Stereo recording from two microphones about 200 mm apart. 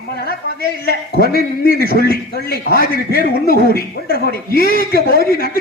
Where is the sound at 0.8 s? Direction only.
50° left (ahead or behind).